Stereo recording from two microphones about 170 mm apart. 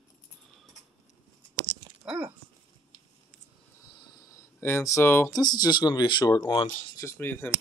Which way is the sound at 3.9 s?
25° left (ahead or behind).